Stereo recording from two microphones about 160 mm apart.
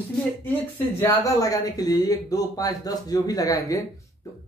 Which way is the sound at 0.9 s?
20° left (ahead or behind).